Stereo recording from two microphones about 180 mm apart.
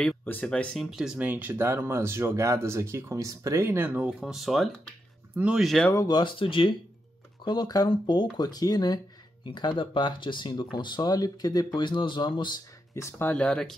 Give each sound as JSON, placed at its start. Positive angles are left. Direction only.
{"t": 0.0, "sound": "speech", "side_deg": 10}
{"t": 5.9, "sound": "speech", "side_deg": 25}